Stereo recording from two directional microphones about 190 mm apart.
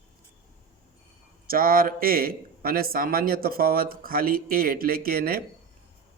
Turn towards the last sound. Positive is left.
turn(degrees=-50)  # may be behind; listen again after turning